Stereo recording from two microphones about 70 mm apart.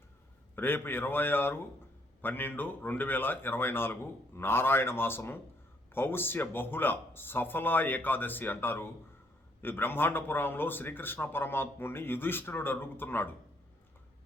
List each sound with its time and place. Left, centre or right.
0.5 s speech: left